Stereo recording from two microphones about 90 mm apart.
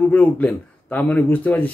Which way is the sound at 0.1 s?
15° left (ahead or behind).